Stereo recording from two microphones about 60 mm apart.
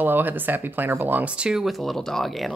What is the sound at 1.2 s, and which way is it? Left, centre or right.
Speech, centre.